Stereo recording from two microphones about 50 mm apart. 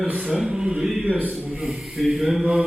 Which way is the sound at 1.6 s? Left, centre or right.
Centre.